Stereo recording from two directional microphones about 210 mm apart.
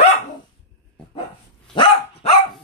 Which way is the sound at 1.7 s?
25° left (ahead or behind).